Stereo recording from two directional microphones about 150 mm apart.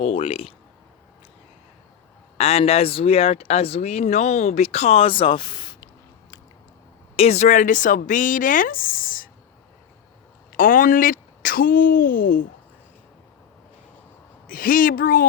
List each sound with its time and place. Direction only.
0.0 s speech: 40° left (ahead or behind)
2.4 s speech: 45° left (ahead or behind)
7.2 s speech: 50° left (ahead or behind); by 9.3 s 70° left (ahead or behind)
10.5 s speech: 65° left (ahead or behind)
14.4 s a woman's voice: 65° left (ahead or behind)